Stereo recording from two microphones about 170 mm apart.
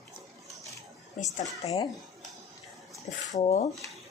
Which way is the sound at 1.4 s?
20° left (ahead or behind).